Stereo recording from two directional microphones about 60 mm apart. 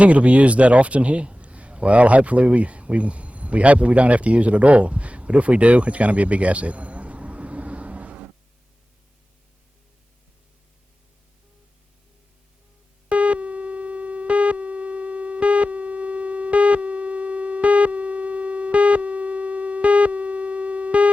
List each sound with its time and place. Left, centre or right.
0.0 s a man's voice: right
13.1 s busy signal: centre